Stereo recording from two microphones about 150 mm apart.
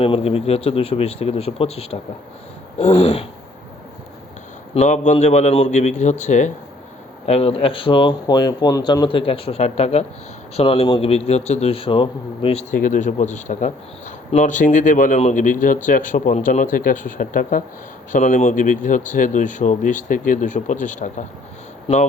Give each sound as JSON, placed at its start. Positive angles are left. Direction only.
{"t": 0.0, "sound": "a man's voice", "side_deg": 40}
{"t": 4.7, "sound": "a man's voice", "side_deg": 50}
{"t": 7.3, "sound": "speech", "side_deg": 40}
{"t": 12.7, "sound": "speech", "side_deg": 60}